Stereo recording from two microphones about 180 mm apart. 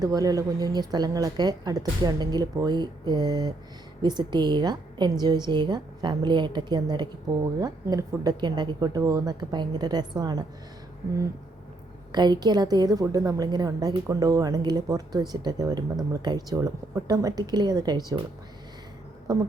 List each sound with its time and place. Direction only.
0.0 s speech: 20° right (ahead or behind)
12.1 s speech: 25° right (ahead or behind)
19.3 s speech: 20° right (ahead or behind)